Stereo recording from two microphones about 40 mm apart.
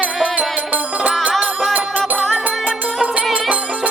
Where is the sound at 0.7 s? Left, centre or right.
Right.